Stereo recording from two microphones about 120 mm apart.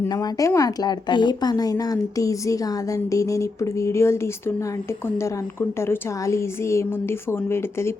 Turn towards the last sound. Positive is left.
turn(degrees=20)  # may be behind; listen again after turning